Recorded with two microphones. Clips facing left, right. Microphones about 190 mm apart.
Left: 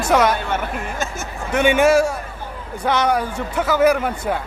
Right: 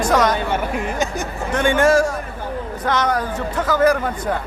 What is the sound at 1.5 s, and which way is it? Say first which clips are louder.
Speech: left 1 dB; 10° left (ahead or behind).